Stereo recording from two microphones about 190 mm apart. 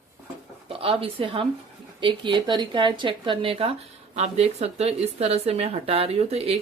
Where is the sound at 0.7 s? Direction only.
30° right (ahead or behind).